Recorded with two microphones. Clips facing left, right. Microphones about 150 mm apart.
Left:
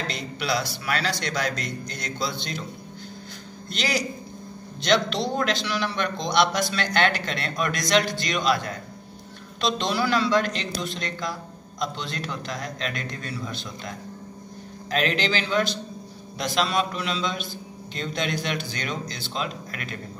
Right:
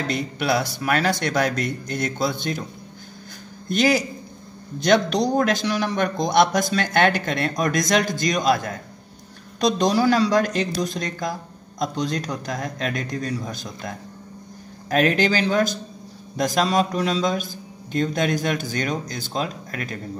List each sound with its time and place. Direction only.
0.1 s a man's voice: 55° right (ahead or behind)
3.6 s a man's voice: 50° right (ahead or behind)
9.6 s a man's voice: 45° right (ahead or behind)